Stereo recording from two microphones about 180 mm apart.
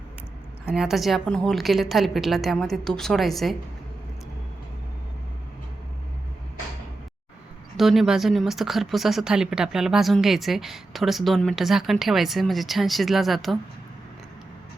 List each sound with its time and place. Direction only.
0.6 s speech: 5° right (ahead or behind)
7.8 s speech: centre (ahead or behind)